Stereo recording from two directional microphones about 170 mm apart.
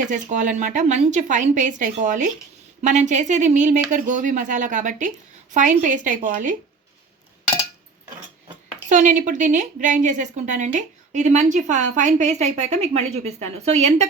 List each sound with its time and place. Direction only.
0.0 s speech: 50° right (ahead or behind)
8.9 s speech: 50° right (ahead or behind)